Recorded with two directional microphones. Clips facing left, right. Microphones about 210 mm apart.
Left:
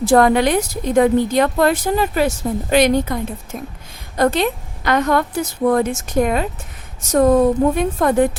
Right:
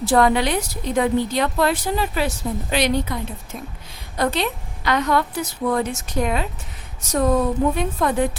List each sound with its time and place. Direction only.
0.0 s a woman's voice: 50° left (ahead or behind)